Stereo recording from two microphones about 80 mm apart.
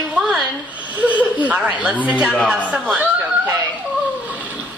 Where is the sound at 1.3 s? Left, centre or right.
Centre.